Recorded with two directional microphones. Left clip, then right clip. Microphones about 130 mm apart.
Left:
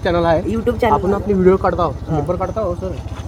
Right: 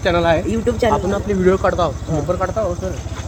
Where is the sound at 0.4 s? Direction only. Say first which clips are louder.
Left 1 dB; 10° right (ahead or behind).